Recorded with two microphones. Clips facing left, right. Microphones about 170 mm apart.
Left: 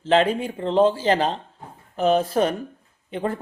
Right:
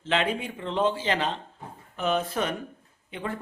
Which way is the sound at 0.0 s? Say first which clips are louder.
Left 8 dB; 35° left (ahead or behind).